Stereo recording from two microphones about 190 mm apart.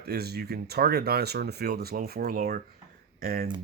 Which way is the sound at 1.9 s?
40° right (ahead or behind).